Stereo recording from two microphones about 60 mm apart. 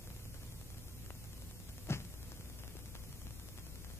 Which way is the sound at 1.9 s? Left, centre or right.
Left.